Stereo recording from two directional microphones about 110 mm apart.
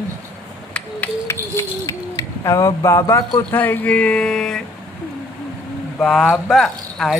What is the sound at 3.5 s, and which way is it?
Speech, 15° left (ahead or behind).